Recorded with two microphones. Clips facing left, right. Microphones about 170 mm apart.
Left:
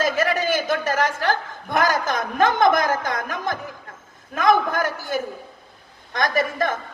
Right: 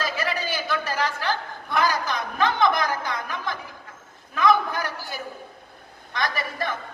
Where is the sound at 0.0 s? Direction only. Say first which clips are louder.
Left 7 dB; 45° left (ahead or behind).